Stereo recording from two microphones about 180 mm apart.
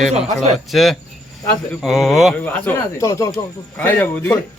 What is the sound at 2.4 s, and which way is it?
Speech, 15° left (ahead or behind).